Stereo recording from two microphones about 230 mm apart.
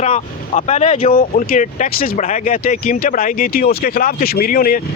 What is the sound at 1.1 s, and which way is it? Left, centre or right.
Speech, left.